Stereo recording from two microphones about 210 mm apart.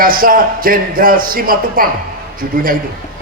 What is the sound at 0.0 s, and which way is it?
Speech, 40° right (ahead or behind).